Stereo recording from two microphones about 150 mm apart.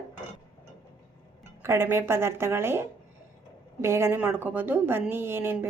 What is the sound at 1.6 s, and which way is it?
A woman's voice, 15° right (ahead or behind).